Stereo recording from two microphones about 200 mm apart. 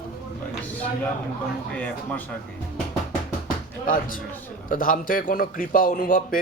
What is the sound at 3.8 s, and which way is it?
A man's voice, 40° left (ahead or behind).